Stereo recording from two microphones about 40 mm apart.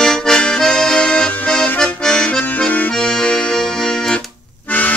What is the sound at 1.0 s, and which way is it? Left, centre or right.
Accordion, left.